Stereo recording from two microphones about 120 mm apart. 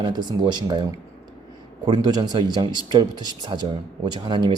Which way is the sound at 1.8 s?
35° right (ahead or behind).